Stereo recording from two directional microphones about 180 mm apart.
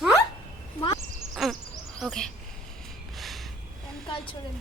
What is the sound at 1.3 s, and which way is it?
Crow, centre (ahead or behind).